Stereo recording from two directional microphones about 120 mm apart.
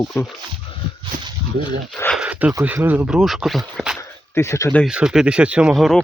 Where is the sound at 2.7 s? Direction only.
15° right (ahead or behind).